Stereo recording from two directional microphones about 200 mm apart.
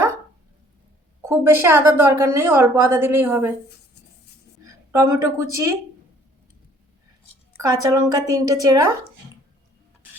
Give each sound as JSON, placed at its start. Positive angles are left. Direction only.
{"t": 1.2, "sound": "a woman's voice", "side_deg": -15}
{"t": 4.6, "sound": "a woman's voice", "side_deg": -15}
{"t": 7.5, "sound": "a woman's voice", "side_deg": -15}